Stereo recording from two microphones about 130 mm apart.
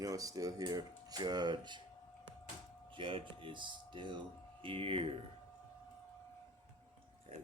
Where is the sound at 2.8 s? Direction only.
40° right (ahead or behind).